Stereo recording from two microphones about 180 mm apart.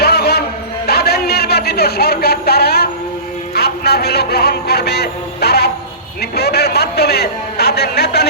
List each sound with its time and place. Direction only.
0.0 s music: 60° left (ahead or behind)
0.9 s a sound: 60° left (ahead or behind)
6.3 s a man's voice: 65° left (ahead or behind)